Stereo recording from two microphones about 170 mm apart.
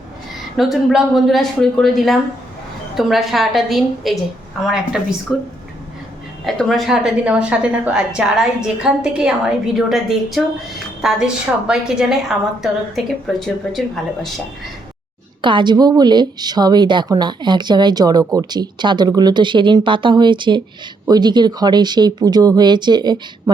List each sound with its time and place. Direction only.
0.5 s a woman's voice: centre (ahead or behind)
15.4 s a woman's voice: 30° right (ahead or behind)